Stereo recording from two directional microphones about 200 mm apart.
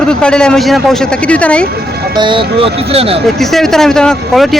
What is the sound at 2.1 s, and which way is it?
Speech, 25° right (ahead or behind).